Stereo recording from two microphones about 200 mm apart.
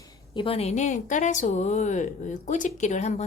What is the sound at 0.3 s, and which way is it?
A woman's voice, 30° left (ahead or behind).